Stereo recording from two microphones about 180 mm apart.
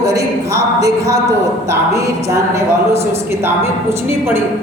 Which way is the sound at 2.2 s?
15° right (ahead or behind).